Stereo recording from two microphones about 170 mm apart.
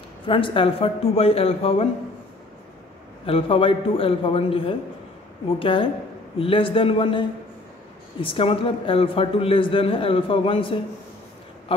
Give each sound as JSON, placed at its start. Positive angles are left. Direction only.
{"t": 0.3, "sound": "a man's voice", "side_deg": 30}
{"t": 3.3, "sound": "a man's voice", "side_deg": 35}